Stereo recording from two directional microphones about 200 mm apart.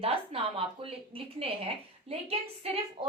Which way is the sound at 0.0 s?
30° right (ahead or behind).